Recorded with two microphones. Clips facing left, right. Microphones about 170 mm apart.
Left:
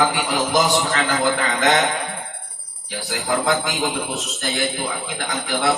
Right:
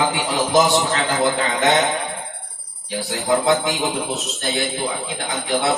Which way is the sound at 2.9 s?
25° right (ahead or behind).